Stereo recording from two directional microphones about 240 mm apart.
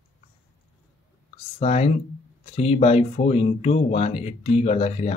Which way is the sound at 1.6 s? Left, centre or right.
Left.